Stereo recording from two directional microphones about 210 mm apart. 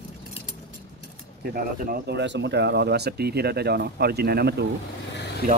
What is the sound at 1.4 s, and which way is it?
Speech, 45° right (ahead or behind).